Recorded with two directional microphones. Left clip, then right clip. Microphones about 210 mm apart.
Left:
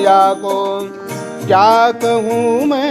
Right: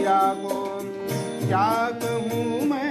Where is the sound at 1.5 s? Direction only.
55° left (ahead or behind).